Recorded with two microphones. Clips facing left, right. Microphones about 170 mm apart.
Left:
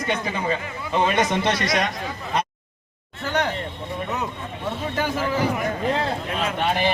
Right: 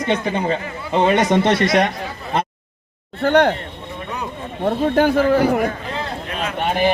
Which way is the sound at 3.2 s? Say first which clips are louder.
Right 10 dB; 60° right (ahead or behind).